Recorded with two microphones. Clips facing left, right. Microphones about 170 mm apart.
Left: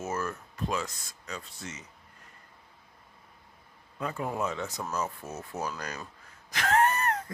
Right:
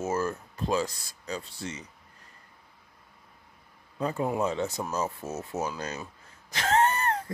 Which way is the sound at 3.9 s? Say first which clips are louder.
Right 4 dB; 30° right (ahead or behind).